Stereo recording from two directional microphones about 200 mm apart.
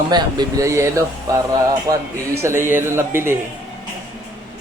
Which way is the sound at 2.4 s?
10° right (ahead or behind).